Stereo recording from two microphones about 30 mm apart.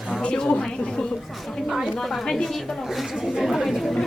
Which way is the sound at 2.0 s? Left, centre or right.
Centre.